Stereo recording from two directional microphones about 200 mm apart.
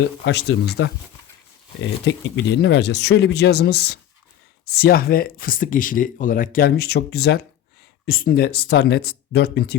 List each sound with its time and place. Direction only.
0.3 s speech: 55° left (ahead or behind)